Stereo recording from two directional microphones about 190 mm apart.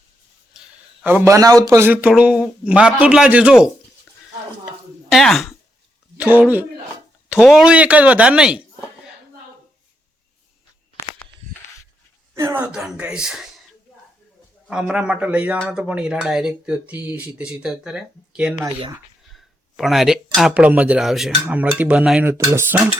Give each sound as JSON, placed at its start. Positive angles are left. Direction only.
{"t": 1.0, "sound": "a man's voice", "side_deg": -10}
{"t": 4.6, "sound": "chopping", "side_deg": 0}
{"t": 6.1, "sound": "a man's voice", "side_deg": -10}
{"t": 12.3, "sound": "speech", "side_deg": -15}
{"t": 14.7, "sound": "speech", "side_deg": -5}
{"t": 18.6, "sound": "a man's voice", "side_deg": -20}
{"t": 19.3, "sound": "a man's voice", "side_deg": 0}